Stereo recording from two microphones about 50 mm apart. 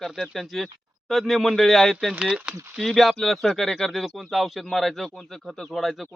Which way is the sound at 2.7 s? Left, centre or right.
Centre.